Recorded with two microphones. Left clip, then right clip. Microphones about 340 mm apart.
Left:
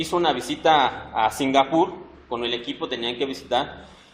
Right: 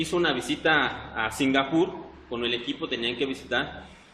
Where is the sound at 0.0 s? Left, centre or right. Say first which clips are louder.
Left 3 dB; centre.